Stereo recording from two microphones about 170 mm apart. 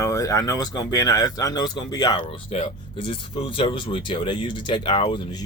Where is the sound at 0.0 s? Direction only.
20° left (ahead or behind).